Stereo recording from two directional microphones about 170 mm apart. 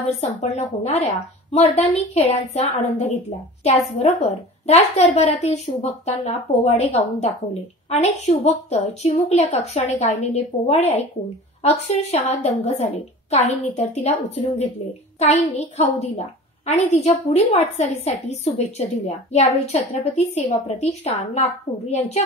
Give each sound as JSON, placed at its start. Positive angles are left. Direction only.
{"t": 0.2, "sound": "a woman's voice", "side_deg": 40}